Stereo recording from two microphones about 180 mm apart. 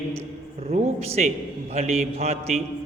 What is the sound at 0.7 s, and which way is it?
A man's voice, 35° right (ahead or behind).